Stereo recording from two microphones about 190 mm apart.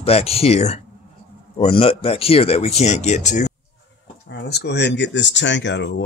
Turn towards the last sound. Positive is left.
turn(degrees=70)  # may be behind; listen again after turning